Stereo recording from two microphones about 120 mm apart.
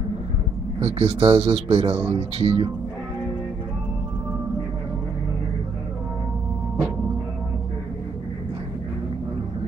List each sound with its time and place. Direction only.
0.7 s a man's voice: 55° right (ahead or behind)